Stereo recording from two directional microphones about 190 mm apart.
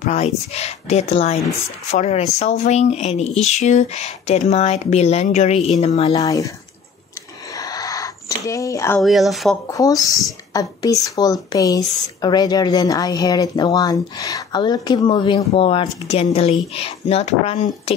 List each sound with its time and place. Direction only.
0.0 s speech: 35° left (ahead or behind)
6.1 s speech: 15° left (ahead or behind)
7.5 s a sound: 20° left (ahead or behind)
9.0 s speech: centre (ahead or behind)
9.7 s speech: 15° left (ahead or behind); by 17.9 s 35° left (ahead or behind)